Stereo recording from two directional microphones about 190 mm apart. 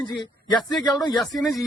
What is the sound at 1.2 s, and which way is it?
Speech, centre (ahead or behind).